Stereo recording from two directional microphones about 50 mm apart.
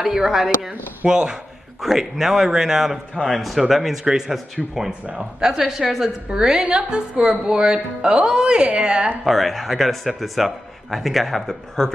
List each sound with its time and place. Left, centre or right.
0.0 s a woman's voice: centre
1.0 s a woman's voice: centre
9.2 s a man's voice: centre